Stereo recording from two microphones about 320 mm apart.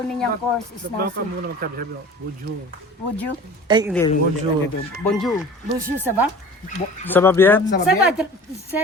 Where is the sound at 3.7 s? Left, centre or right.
Centre.